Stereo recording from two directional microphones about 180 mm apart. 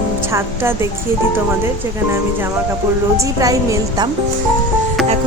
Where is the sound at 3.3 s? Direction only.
20° right (ahead or behind).